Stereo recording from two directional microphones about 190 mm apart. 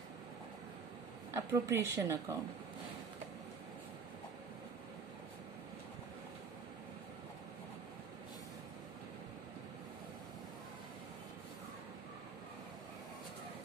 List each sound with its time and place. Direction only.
1.3 s speech: 15° right (ahead or behind)